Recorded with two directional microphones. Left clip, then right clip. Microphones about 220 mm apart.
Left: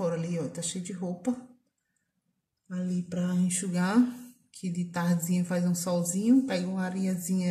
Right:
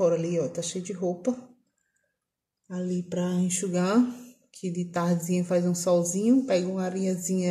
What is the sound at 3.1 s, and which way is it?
A woman's voice, centre (ahead or behind).